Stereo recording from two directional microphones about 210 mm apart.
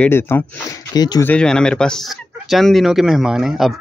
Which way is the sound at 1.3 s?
5° left (ahead or behind).